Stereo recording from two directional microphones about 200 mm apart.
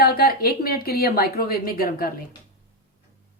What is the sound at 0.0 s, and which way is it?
Speech, 50° left (ahead or behind).